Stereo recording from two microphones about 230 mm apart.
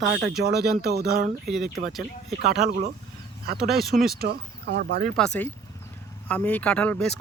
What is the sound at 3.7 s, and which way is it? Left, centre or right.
Speech, centre.